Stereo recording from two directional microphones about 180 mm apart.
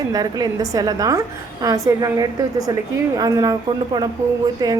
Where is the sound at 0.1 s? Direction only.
20° right (ahead or behind).